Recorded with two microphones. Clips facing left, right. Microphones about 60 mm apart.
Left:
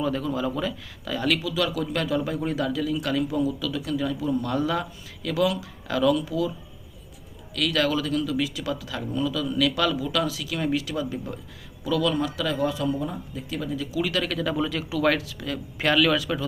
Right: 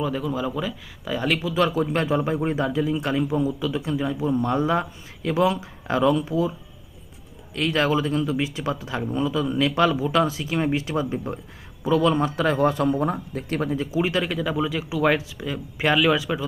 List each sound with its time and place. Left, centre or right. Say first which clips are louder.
0.0 s speech: right 1 dB; centre; by 6.5 s right
7.5 s speech: right 2 dB; right